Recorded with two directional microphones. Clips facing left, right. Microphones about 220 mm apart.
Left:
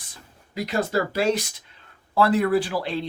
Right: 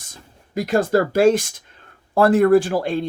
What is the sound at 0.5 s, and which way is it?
Speech, 50° right (ahead or behind).